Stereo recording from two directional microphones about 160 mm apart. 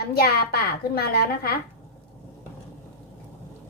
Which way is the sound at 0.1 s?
75° left (ahead or behind).